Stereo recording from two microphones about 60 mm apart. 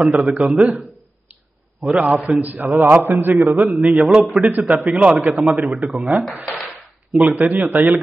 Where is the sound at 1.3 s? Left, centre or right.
Right.